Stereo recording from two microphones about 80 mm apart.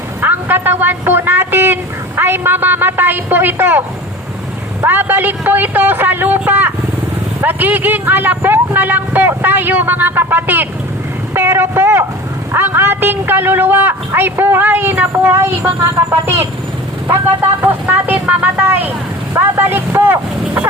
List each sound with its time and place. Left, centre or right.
0.2 s a man's voice: right
4.9 s speech: right
11.3 s vehicle: right
12.5 s speech: right
17.6 s speech: right